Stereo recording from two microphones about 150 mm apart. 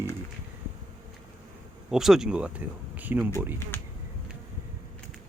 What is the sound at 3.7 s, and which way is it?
Insect, 10° left (ahead or behind).